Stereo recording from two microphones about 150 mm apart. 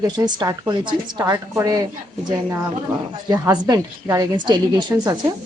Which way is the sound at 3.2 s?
25° right (ahead or behind).